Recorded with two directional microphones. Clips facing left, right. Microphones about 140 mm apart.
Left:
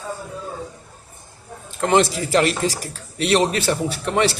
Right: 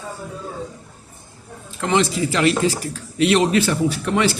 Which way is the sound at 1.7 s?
45° left (ahead or behind).